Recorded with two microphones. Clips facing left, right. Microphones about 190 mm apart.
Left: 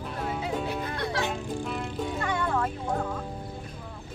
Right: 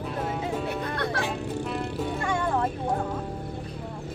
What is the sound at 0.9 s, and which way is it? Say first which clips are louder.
Music: right 1 dB; 60° right (ahead or behind).